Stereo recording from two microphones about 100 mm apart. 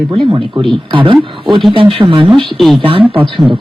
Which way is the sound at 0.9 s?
55° right (ahead or behind).